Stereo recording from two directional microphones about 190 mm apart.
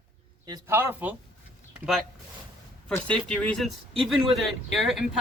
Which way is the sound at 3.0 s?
5° left (ahead or behind).